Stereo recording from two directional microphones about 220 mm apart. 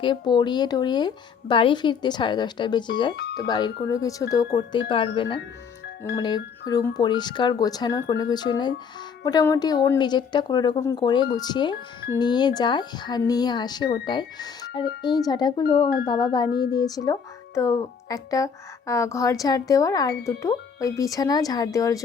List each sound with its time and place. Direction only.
0.0 s a woman's voice: 20° left (ahead or behind)